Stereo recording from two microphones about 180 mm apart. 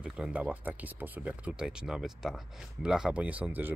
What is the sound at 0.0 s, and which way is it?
Speech, 5° right (ahead or behind).